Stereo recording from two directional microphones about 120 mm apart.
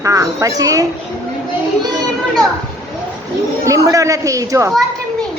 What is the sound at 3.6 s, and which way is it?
A woman's voice, 25° right (ahead or behind).